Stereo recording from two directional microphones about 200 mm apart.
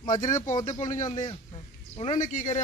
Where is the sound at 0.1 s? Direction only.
40° left (ahead or behind).